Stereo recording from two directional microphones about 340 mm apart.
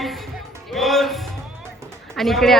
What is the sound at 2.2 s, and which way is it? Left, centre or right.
Speech, centre.